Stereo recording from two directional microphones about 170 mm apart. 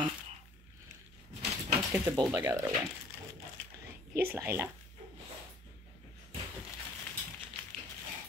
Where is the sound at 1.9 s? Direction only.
15° right (ahead or behind).